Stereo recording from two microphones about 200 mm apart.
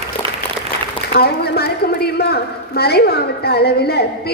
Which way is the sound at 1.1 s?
50° left (ahead or behind).